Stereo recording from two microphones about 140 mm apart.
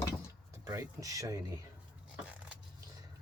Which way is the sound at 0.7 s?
25° right (ahead or behind).